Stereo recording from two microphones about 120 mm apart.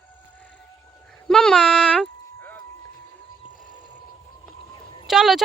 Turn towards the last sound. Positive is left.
turn(degrees=-5)  # may be behind; listen again after turning